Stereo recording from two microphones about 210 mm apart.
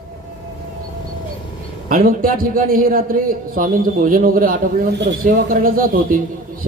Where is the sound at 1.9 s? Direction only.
40° right (ahead or behind).